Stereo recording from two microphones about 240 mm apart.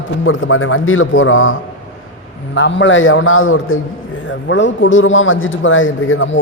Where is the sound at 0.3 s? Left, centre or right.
Left.